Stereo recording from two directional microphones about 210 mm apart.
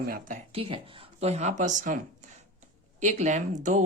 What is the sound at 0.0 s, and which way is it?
Speech, 45° right (ahead or behind).